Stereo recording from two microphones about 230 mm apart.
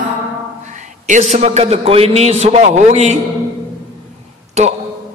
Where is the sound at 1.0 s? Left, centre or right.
Right.